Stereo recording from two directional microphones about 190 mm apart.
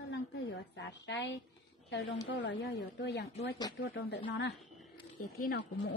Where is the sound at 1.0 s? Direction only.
70° left (ahead or behind).